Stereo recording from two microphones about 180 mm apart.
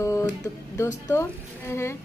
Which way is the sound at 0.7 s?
15° left (ahead or behind).